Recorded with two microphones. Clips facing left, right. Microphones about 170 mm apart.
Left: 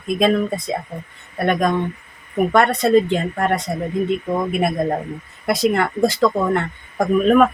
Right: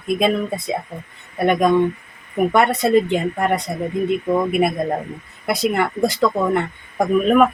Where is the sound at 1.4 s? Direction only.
10° right (ahead or behind).